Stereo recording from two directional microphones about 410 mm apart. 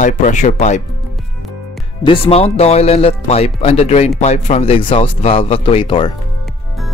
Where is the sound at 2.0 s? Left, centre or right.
Centre.